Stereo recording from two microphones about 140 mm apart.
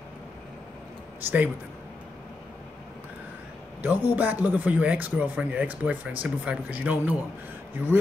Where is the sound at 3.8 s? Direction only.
10° right (ahead or behind).